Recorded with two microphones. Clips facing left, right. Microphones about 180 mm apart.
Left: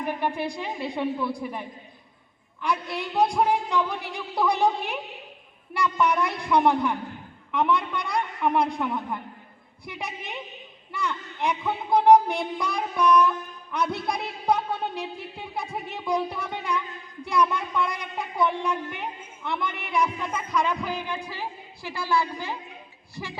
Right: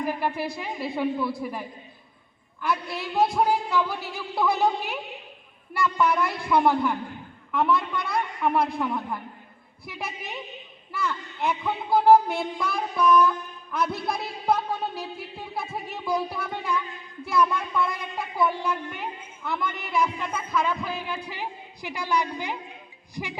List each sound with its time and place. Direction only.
0.0 s speech: 5° right (ahead or behind)
21.2 s speech: 15° right (ahead or behind)